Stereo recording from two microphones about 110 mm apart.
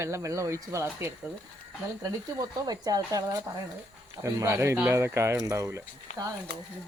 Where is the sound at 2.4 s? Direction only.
35° right (ahead or behind).